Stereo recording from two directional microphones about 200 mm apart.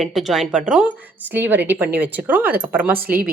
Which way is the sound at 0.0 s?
Centre (ahead or behind).